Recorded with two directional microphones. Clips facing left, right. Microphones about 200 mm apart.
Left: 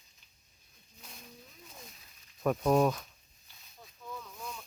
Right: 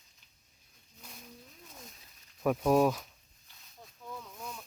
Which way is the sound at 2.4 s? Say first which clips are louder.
Right 1 dB; 5° right (ahead or behind).